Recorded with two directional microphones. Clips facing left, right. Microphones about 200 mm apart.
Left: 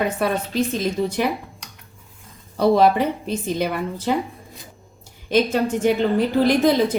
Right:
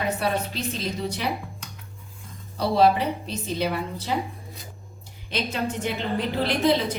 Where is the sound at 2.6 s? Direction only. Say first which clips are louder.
Left 4 dB; 50° left (ahead or behind).